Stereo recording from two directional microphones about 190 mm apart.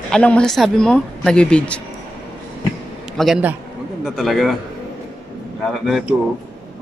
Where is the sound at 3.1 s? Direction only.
Centre (ahead or behind).